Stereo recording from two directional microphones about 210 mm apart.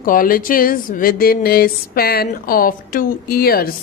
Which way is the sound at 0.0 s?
40° left (ahead or behind).